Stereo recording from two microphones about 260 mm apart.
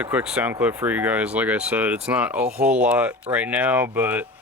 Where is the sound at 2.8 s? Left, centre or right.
Centre.